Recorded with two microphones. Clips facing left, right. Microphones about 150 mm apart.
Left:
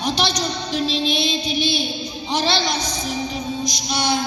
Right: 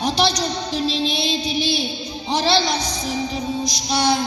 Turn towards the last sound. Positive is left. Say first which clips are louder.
# right 2 dB
turn(degrees=-35)  # may be behind; listen again after turning